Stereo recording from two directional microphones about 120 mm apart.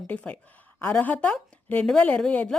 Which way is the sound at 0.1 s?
10° left (ahead or behind).